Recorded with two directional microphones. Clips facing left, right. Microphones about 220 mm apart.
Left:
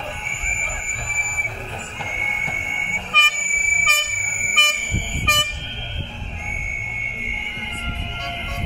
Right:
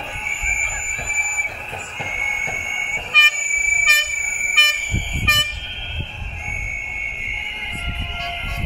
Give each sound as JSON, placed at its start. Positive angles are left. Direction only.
{"t": 3.1, "sound": "vehicle", "side_deg": 55}
{"t": 3.9, "sound": "vehicle horn", "side_deg": 55}
{"t": 4.6, "sound": "train", "side_deg": 50}
{"t": 5.2, "sound": "vehicle", "side_deg": 50}